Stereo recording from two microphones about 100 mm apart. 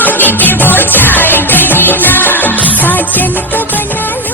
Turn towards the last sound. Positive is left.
turn(degrees=20)  # may be behind; listen again after turning